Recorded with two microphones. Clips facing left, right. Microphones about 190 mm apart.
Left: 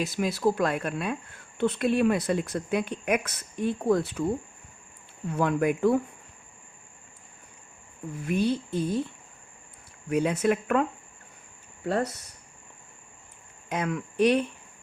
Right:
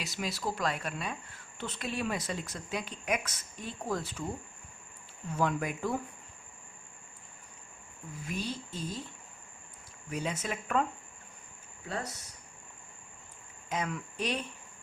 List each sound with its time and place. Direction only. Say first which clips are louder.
0.0 s speech: left 10 dB; 50° left (ahead or behind)
5.3 s speech: left 7 dB; 60° left (ahead or behind)
8.2 s speech: left 11 dB; 60° left (ahead or behind)
10.1 s speech: left 11 dB; 60° left (ahead or behind)
13.7 s speech: left 5 dB; 60° left (ahead or behind)